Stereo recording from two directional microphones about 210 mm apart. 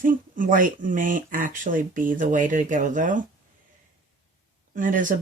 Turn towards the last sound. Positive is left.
turn(degrees=-40)  # may be behind; listen again after turning